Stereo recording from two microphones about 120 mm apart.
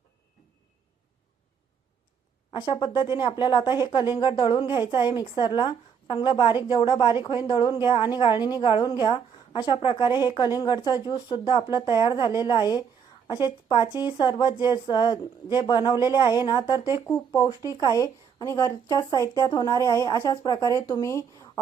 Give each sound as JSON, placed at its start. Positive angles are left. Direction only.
{"t": 2.5, "sound": "speech", "side_deg": 35}